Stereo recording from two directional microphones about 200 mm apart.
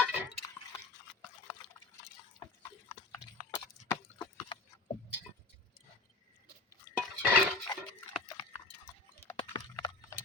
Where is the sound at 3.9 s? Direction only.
25° left (ahead or behind).